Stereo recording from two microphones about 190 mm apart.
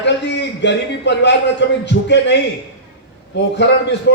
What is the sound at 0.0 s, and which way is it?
A man's voice, 65° left (ahead or behind).